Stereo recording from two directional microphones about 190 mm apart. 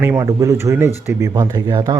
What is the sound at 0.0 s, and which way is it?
Speech, 15° right (ahead or behind).